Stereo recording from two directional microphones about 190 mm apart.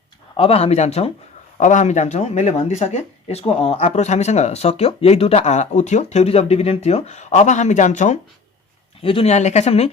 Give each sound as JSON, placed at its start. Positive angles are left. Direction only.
{"t": 0.3, "sound": "speech", "side_deg": 30}